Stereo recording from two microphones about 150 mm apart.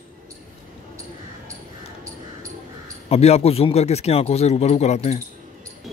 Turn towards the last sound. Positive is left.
turn(degrees=50)  # may be behind; listen again after turning